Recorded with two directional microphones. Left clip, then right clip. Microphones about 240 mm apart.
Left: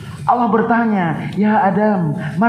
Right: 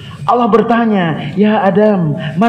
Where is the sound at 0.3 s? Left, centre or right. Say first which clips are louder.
Right 4 dB; right.